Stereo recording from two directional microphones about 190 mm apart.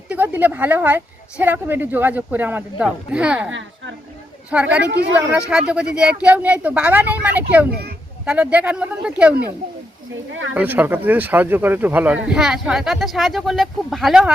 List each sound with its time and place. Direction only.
0.1 s a woman's voice: 10° right (ahead or behind)
4.5 s a woman's voice: 10° right (ahead or behind)
4.9 s a woman's voice: 65° right (ahead or behind)
5.5 s a woman's voice: 5° right (ahead or behind)
7.7 s a child's voice: 55° right (ahead or behind)
8.2 s a woman's voice: 5° right (ahead or behind)
10.5 s speech: 10° right (ahead or behind)